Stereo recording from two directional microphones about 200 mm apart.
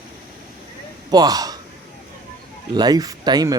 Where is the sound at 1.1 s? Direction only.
20° right (ahead or behind).